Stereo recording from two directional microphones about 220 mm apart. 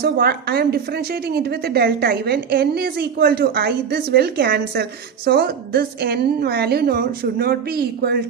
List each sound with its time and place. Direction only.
0.0 s a woman's voice: 45° right (ahead or behind)